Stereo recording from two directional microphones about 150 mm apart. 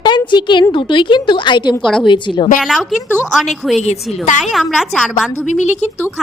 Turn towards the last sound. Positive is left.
turn(degrees=50)  # may be behind; listen again after turning